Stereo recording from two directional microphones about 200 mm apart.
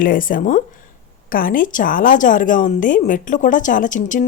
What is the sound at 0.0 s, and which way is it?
A woman's voice, 45° left (ahead or behind).